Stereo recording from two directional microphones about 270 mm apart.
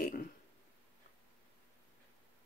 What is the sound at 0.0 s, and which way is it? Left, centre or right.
Burping, left.